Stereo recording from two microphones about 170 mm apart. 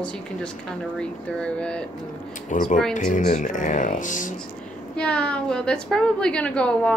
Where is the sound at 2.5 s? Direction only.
50° left (ahead or behind).